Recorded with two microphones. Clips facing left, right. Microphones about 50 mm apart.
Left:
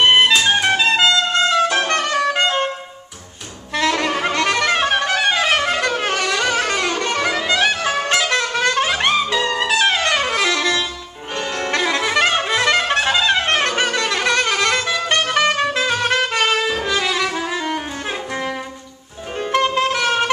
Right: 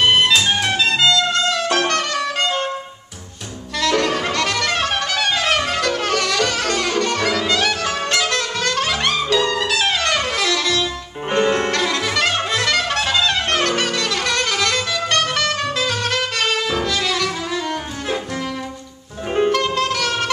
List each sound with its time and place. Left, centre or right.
0.0 s music: left
3.7 s music: left
11.3 s music: right
11.7 s brass instrument: centre
16.8 s saxophone: centre
19.5 s music: left